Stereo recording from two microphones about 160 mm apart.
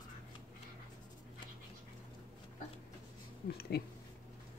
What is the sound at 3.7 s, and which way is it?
Speech, 85° left.